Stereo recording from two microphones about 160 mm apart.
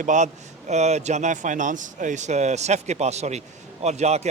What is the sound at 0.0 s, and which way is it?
Speech, 50° right (ahead or behind).